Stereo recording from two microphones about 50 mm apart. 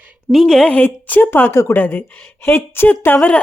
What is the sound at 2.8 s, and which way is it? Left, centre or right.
Speech, left.